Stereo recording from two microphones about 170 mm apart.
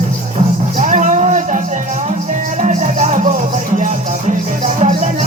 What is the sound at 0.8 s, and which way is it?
Music, 50° right (ahead or behind).